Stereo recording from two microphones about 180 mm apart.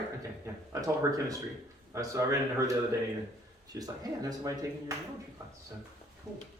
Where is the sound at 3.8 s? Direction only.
20° right (ahead or behind).